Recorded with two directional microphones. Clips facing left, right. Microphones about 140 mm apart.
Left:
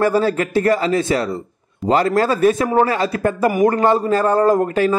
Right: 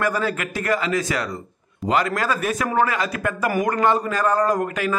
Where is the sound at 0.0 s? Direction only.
30° left (ahead or behind).